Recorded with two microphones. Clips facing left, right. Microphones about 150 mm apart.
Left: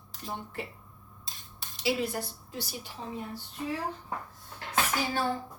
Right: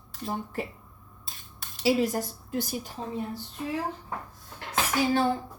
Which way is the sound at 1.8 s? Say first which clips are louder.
Right 6 dB; 40° right (ahead or behind).